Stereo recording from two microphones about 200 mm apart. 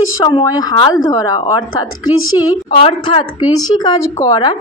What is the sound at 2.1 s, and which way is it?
Speech, 90° left.